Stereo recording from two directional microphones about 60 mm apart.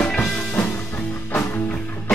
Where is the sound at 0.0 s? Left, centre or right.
Centre.